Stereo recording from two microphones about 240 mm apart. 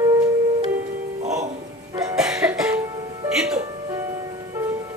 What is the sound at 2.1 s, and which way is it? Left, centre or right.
Music, centre.